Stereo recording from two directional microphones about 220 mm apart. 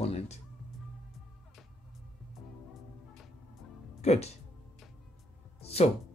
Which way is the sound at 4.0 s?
30° left (ahead or behind).